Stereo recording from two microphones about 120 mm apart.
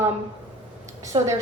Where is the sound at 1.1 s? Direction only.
45° right (ahead or behind).